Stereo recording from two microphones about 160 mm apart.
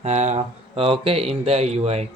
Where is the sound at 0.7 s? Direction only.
35° right (ahead or behind).